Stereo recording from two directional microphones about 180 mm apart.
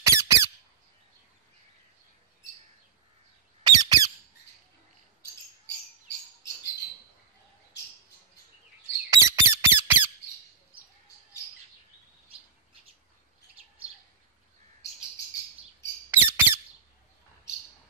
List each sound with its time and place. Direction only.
0.0 s squeak: 15° right (ahead or behind)
3.6 s squawk: 20° right (ahead or behind)
9.1 s squawk: 15° right (ahead or behind)
16.1 s squawk: 10° right (ahead or behind)